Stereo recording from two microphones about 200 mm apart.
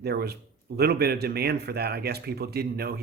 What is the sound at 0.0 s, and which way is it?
A man's voice, 55° right (ahead or behind).